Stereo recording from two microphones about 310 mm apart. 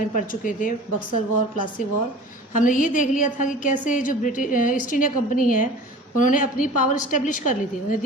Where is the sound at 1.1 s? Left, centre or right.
Left.